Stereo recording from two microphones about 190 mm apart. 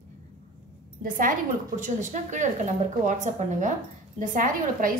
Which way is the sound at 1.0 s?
45° right (ahead or behind).